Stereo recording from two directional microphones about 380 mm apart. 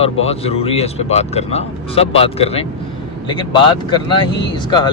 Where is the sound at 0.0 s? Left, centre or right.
Centre.